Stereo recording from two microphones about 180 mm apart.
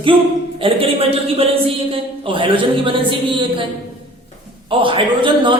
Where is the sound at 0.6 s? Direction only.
30° right (ahead or behind).